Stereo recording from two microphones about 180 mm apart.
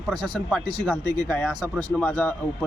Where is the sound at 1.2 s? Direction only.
Centre (ahead or behind).